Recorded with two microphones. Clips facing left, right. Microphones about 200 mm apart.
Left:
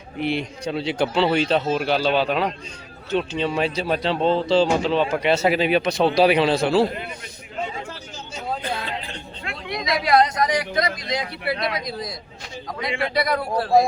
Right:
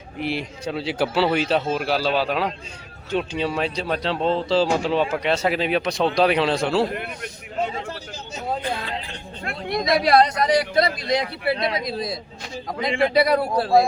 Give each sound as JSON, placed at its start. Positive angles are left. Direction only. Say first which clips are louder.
{"t": 0.2, "sound": "speech", "louder": "left 2 dB", "side_deg": -5}
{"t": 3.6, "sound": "speech", "louder": "left 2 dB", "side_deg": 5}
{"t": 5.0, "sound": "speech", "louder": "left 2 dB", "side_deg": 5}
{"t": 6.9, "sound": "a man's voice", "louder": "right 2 dB", "side_deg": -60}
{"t": 9.4, "sound": "a sound", "louder": "right 5 dB", "side_deg": -50}
{"t": 10.0, "sound": "a man's voice", "louder": "left 1 dB", "side_deg": -35}